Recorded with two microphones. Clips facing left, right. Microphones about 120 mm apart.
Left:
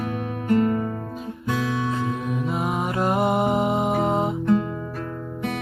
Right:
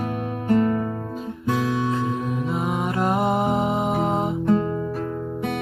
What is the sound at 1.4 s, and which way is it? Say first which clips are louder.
Guitar: right 2 dB; 25° right (ahead or behind).